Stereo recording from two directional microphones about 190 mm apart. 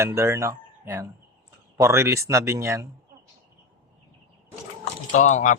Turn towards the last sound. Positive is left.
turn(degrees=40)  # may be behind; listen again after turning